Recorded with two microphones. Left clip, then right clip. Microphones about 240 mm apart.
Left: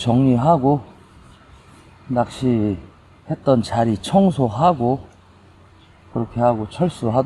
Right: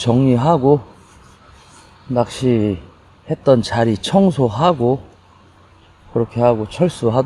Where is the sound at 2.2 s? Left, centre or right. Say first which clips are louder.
Right 3 dB; right.